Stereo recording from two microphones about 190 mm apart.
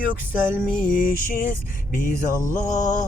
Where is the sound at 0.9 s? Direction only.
45° left (ahead or behind).